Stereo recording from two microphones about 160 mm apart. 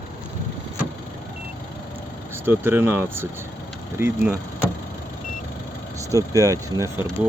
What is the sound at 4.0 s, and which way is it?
Speech, 15° right (ahead or behind).